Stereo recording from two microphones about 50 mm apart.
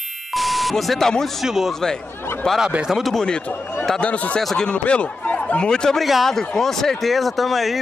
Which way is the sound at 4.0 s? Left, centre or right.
Left.